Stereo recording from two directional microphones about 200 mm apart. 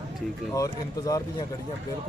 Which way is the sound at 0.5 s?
15° left (ahead or behind).